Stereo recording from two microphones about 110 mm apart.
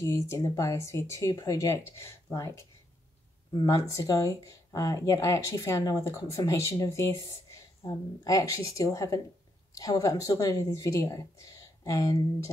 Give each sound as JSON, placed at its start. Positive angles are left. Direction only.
{"t": 0.0, "sound": "speech", "side_deg": 30}